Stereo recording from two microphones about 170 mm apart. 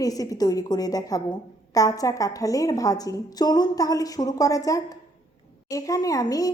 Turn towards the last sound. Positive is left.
turn(degrees=20)  # may be behind; listen again after turning